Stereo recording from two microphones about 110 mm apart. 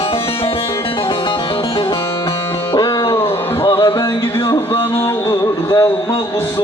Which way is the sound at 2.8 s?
30° left (ahead or behind).